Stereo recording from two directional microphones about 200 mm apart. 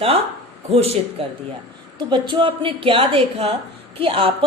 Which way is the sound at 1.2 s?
30° right (ahead or behind).